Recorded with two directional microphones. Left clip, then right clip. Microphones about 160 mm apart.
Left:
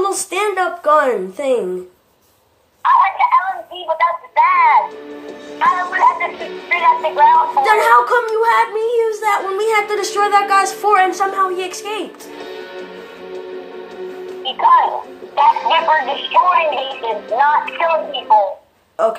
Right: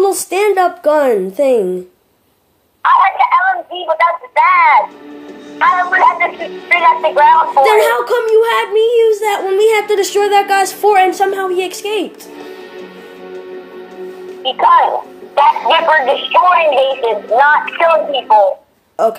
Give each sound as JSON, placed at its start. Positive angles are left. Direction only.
{"t": 0.0, "sound": "a woman's voice", "side_deg": -50}
{"t": 2.8, "sound": "speech", "side_deg": -30}
{"t": 7.6, "sound": "a woman's voice", "side_deg": -55}
{"t": 14.4, "sound": "speech", "side_deg": -30}
{"t": 19.0, "sound": "a woman's voice", "side_deg": -50}